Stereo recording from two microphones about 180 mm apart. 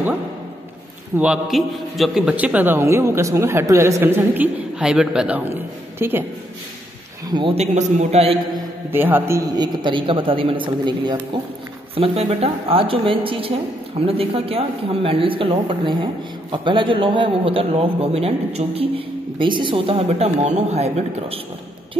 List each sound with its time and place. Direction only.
1.1 s a man's voice: 5° right (ahead or behind)
7.2 s a man's voice: 25° right (ahead or behind)
8.9 s a man's voice: 10° right (ahead or behind); by 21.4 s 35° right (ahead or behind)